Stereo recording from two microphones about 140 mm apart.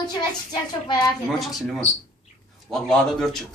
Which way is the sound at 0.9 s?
30° left (ahead or behind).